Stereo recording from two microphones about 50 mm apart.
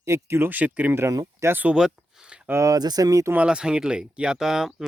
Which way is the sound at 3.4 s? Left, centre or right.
Centre.